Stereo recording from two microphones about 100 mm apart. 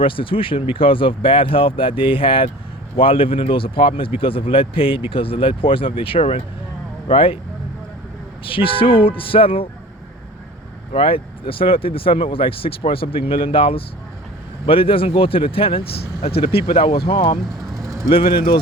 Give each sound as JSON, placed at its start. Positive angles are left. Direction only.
{"t": 0.0, "sound": "speech", "side_deg": 60}
{"t": 8.4, "sound": "speech", "side_deg": 60}
{"t": 10.9, "sound": "speech", "side_deg": 65}
{"t": 17.8, "sound": "vehicle", "side_deg": -35}
{"t": 18.1, "sound": "speech", "side_deg": 60}